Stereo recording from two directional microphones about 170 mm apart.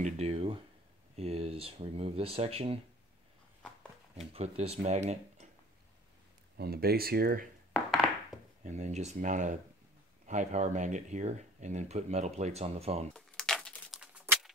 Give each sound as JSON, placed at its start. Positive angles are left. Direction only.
{"t": 0.0, "sound": "a sound", "side_deg": -35}
{"t": 1.1, "sound": "speech", "side_deg": -35}
{"t": 4.1, "sound": "speech", "side_deg": -35}
{"t": 6.5, "sound": "speech", "side_deg": -65}
{"t": 8.6, "sound": "speech", "side_deg": -40}
{"t": 13.1, "sound": "a sound", "side_deg": 5}